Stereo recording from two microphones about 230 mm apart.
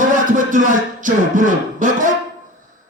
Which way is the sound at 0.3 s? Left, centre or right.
Right.